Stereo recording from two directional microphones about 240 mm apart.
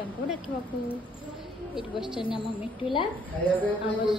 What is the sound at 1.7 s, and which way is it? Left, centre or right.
Speech, centre.